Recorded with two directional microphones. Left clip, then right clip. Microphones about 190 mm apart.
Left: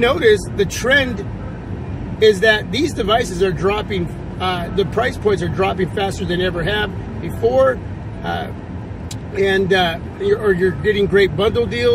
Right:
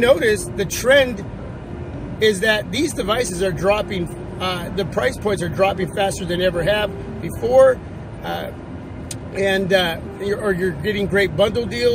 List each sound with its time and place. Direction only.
0.0 s speech: 25° right (ahead or behind)
2.1 s speech: 20° right (ahead or behind)
9.3 s speech: 20° right (ahead or behind)